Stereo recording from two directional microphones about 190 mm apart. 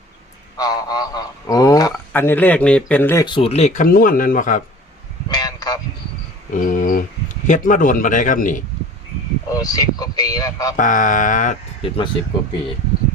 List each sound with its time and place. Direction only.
0.5 s speech: 20° left (ahead or behind)
3.2 s speech: 30° left (ahead or behind); by 4.6 s 45° left (ahead or behind)
5.3 s a sound: 20° left (ahead or behind)
6.5 s a sound: 45° left (ahead or behind)
7.4 s speech: 45° left (ahead or behind)
9.5 s speech: 20° left (ahead or behind)
10.8 s speech: 45° left (ahead or behind)
11.8 s speech: 30° left (ahead or behind)